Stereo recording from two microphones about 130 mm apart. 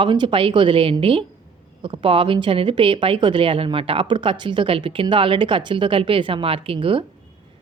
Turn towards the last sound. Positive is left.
turn(degrees=-45)  # may be behind; listen again after turning